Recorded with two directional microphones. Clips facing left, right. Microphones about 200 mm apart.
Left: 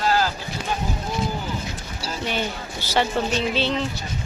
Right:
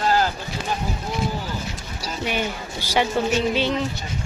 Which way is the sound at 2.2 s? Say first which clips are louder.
Right 2 dB; 10° right (ahead or behind).